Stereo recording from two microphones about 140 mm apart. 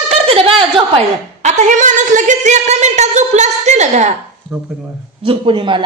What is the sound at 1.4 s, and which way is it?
A woman's voice, 60° right (ahead or behind).